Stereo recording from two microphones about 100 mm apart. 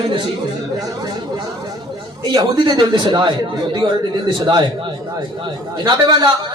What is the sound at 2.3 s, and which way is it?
A man's voice, 45° right (ahead or behind).